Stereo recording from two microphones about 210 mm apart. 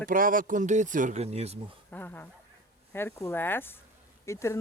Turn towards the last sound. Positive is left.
turn(degrees=15)  # may be behind; listen again after turning